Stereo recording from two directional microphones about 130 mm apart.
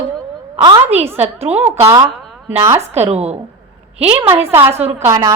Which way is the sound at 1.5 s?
20° right (ahead or behind).